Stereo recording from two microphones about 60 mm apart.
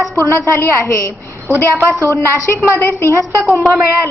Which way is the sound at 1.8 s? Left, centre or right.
Right.